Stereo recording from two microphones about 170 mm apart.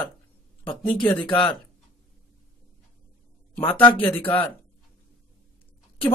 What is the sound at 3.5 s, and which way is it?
Speech, 10° left (ahead or behind).